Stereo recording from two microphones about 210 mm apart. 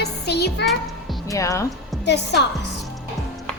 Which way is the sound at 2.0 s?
55° left (ahead or behind).